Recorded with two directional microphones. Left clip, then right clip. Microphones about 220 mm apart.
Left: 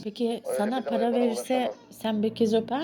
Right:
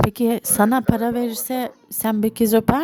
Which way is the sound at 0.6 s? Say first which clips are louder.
Right 9 dB; 40° right (ahead or behind).